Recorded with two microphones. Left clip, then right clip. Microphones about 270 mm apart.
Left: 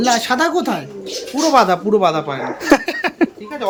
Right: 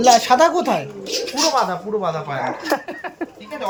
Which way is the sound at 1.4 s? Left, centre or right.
Left.